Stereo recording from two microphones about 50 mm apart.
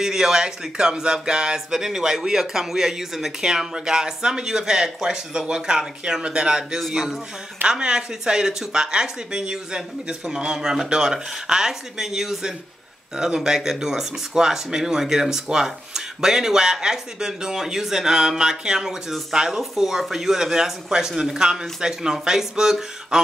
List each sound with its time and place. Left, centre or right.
0.0 s speech: centre